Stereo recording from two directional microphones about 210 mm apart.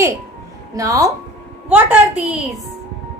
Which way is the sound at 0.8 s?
15° right (ahead or behind).